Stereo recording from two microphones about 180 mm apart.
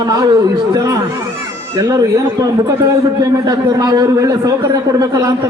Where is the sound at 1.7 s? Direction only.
20° right (ahead or behind).